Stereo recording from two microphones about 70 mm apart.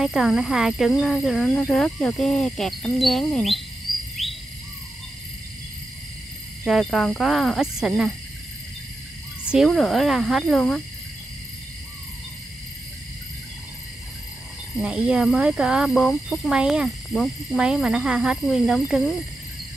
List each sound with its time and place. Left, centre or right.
0.0 s speech: centre
4.2 s cricket: centre
6.6 s speech: centre
9.6 s speech: centre
15.0 s speech: centre
17.7 s speech: centre
18.4 s speech: centre